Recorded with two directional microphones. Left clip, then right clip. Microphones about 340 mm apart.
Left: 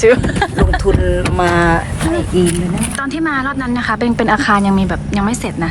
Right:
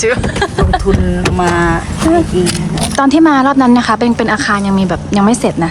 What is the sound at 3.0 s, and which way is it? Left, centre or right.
Speech, centre.